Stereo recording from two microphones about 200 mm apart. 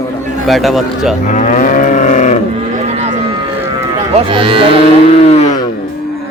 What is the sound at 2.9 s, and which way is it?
Cattle, 35° right (ahead or behind).